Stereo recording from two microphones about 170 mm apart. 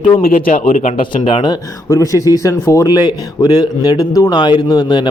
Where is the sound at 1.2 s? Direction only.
30° left (ahead or behind).